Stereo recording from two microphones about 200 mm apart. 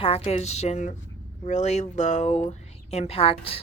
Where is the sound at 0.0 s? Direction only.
30° left (ahead or behind).